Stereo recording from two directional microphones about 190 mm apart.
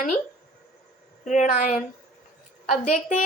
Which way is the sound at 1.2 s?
40° left (ahead or behind).